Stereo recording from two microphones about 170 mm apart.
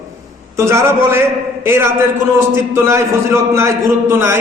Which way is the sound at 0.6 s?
15° right (ahead or behind).